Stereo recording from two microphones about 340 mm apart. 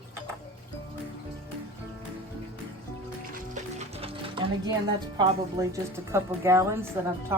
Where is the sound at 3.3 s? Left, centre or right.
Right.